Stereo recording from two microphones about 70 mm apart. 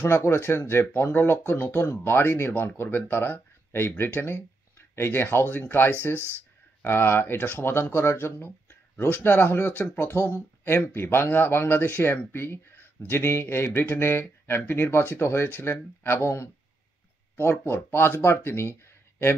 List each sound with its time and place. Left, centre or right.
0.0 s speech: left
6.1 s speech: right
6.8 s speech: left